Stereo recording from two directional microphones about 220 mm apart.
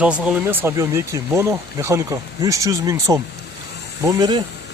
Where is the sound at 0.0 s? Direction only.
5° right (ahead or behind); by 4.4 s 20° right (ahead or behind).